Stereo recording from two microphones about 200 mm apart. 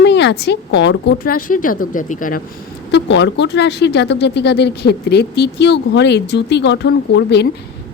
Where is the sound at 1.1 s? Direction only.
45° left (ahead or behind).